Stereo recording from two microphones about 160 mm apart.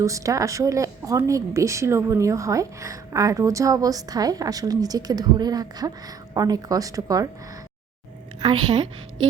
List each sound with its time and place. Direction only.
0.0 s speech: 20° right (ahead or behind)
8.4 s speech: 25° right (ahead or behind)